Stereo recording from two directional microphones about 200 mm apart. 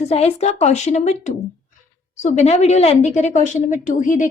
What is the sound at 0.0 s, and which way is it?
A woman's voice, 30° left (ahead or behind).